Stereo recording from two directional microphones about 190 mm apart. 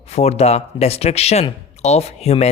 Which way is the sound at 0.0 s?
35° left (ahead or behind).